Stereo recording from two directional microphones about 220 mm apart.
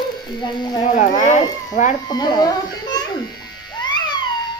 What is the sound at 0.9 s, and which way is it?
Speech, 35° left (ahead or behind).